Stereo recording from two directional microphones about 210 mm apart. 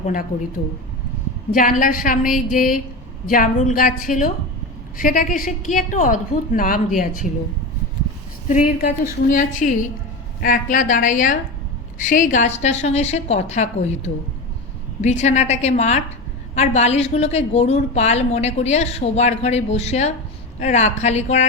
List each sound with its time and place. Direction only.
0.0 s a woman's voice: 40° left (ahead or behind)
1.5 s a woman's voice: 40° left (ahead or behind)
8.4 s a woman's voice: 40° left (ahead or behind)